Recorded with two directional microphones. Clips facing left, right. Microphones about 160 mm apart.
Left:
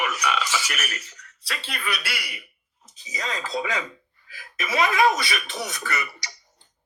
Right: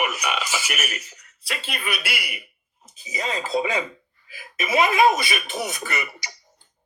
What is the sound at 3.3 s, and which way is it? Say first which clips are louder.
A woman's voice: right 4 dB; 25° right (ahead or behind).